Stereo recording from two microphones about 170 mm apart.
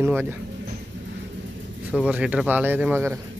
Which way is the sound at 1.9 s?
5° right (ahead or behind).